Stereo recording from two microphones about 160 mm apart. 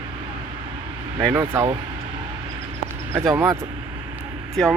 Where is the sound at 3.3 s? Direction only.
20° right (ahead or behind).